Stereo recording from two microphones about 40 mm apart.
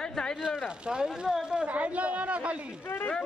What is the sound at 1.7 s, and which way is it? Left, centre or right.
Speech, right.